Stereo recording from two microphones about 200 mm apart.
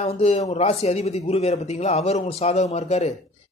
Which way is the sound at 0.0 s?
30° left (ahead or behind).